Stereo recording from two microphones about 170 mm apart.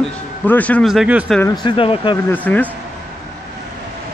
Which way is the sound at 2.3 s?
10° left (ahead or behind).